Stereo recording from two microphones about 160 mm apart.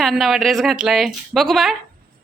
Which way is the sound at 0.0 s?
Centre (ahead or behind).